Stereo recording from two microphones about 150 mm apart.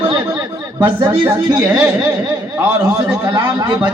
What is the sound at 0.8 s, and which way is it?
A man's voice, 10° right (ahead or behind).